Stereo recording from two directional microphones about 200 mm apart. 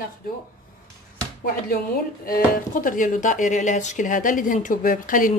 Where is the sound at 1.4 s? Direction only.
45° left (ahead or behind).